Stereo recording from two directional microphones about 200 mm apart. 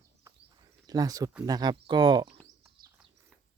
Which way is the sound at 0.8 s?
20° right (ahead or behind).